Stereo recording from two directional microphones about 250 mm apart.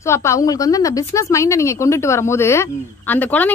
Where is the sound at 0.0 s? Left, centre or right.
Centre.